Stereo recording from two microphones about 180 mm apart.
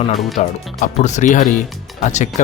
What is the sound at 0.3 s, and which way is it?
Speech, 40° left (ahead or behind).